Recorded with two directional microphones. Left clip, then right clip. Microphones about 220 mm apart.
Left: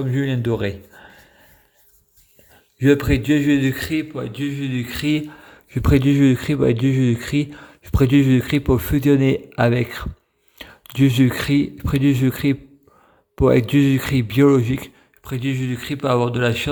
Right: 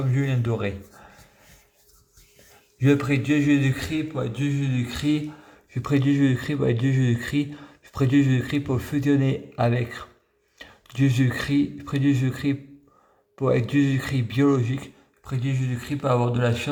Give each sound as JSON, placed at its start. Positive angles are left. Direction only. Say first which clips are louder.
{"t": 0.0, "sound": "speech", "louder": "left 5 dB", "side_deg": 30}
{"t": 2.8, "sound": "speech", "louder": "left 5 dB", "side_deg": 35}